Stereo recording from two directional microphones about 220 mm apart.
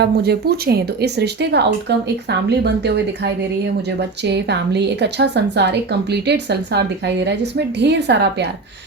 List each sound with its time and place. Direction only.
0.0 s a woman's voice: 45° right (ahead or behind)
4.2 s a woman's voice: 50° right (ahead or behind)